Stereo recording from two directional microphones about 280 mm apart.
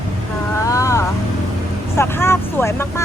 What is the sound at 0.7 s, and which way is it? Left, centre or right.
Speech, centre.